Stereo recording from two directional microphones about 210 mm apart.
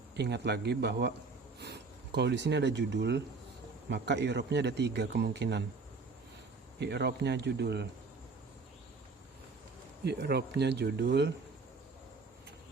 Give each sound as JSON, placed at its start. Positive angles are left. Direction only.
{"t": 0.2, "sound": "a man's voice", "side_deg": -55}
{"t": 6.7, "sound": "speech", "side_deg": -50}
{"t": 10.0, "sound": "speech", "side_deg": -50}